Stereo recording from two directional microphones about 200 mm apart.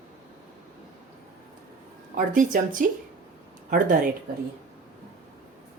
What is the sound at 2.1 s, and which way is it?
A woman's voice, 40° right (ahead or behind).